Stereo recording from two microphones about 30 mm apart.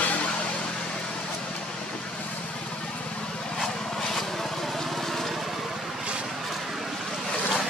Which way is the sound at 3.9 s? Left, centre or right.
Centre.